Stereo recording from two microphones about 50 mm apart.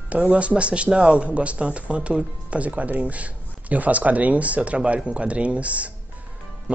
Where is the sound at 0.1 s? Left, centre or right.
Right.